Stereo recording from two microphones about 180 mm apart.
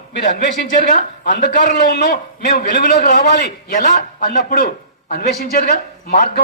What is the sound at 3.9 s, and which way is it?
Speech, 50° left (ahead or behind).